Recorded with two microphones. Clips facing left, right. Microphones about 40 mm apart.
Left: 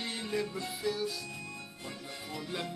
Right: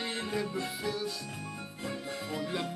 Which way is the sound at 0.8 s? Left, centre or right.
Centre.